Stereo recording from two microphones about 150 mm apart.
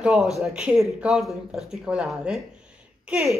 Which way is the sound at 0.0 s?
5° right (ahead or behind).